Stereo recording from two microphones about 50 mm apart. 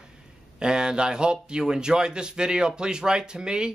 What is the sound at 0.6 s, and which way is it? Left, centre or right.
Speech, centre.